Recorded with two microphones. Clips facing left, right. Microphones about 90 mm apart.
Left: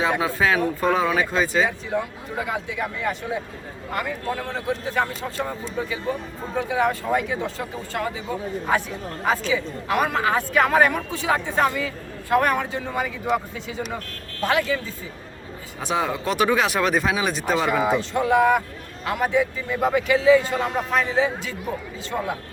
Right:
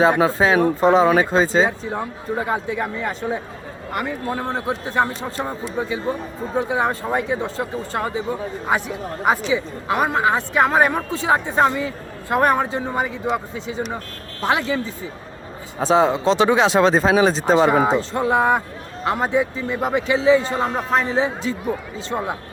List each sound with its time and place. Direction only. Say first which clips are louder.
0.0 s a woman's voice: right 6 dB; 35° right (ahead or behind)
6.6 s a woman's voice: right 1 dB; 30° right (ahead or behind)
15.8 s a woman's voice: right 8 dB; 30° right (ahead or behind)